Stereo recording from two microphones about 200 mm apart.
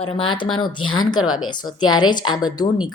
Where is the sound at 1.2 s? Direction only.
90° left.